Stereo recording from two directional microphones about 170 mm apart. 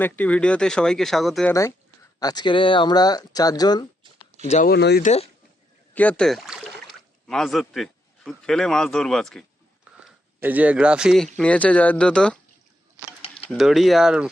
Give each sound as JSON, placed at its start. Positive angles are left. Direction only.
{"t": 0.0, "sound": "a man's voice", "side_deg": 10}
{"t": 1.5, "sound": "speech", "side_deg": 15}
{"t": 4.4, "sound": "speech", "side_deg": 45}
{"t": 4.7, "sound": "speech", "side_deg": 75}
{"t": 5.0, "sound": "speech", "side_deg": 40}
{"t": 5.9, "sound": "a man's voice", "side_deg": 10}
{"t": 10.0, "sound": "speech", "side_deg": -10}
{"t": 13.5, "sound": "a man's voice", "side_deg": 0}